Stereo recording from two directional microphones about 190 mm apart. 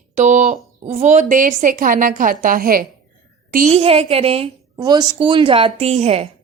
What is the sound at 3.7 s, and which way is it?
Speech, 30° right (ahead or behind).